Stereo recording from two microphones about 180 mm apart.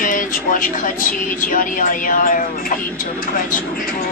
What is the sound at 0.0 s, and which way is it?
Speech, 45° left (ahead or behind).